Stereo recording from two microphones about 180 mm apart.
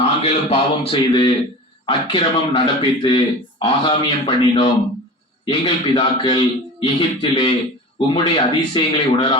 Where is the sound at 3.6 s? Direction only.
30° left (ahead or behind).